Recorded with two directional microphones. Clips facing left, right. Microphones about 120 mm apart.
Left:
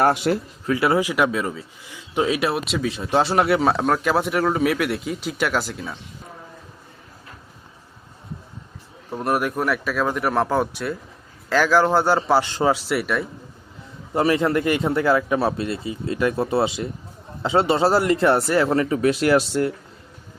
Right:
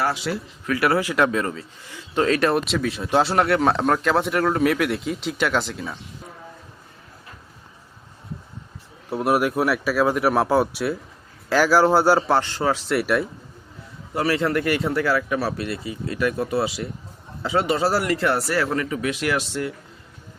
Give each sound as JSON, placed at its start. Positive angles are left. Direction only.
{"t": 0.0, "sound": "speech", "side_deg": 50}
{"t": 0.7, "sound": "a man's voice", "side_deg": 20}
{"t": 9.0, "sound": "a man's voice", "side_deg": -5}
{"t": 12.4, "sound": "speech", "side_deg": 15}
{"t": 12.9, "sound": "a man's voice", "side_deg": 0}
{"t": 14.1, "sound": "speech", "side_deg": 25}